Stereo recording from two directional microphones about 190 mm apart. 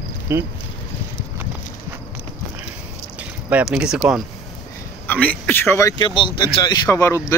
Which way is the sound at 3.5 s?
10° right (ahead or behind).